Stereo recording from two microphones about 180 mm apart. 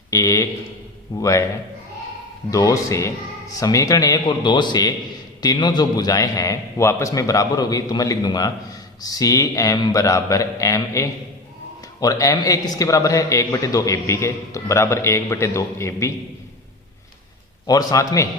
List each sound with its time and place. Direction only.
0.1 s a man's voice: 20° left (ahead or behind)
2.5 s a man's voice: 20° left (ahead or behind)
17.7 s a man's voice: 20° left (ahead or behind)